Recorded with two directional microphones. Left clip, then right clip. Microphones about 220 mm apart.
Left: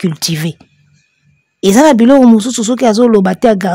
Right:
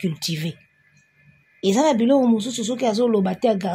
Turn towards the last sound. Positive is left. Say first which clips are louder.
# left 10 dB
turn(degrees=45)  # may be behind; listen again after turning